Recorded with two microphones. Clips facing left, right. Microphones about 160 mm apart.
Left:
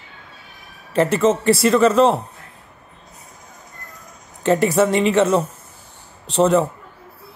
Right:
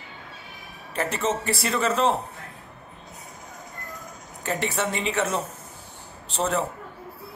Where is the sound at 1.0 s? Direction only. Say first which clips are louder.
Left 10 dB; 85° left.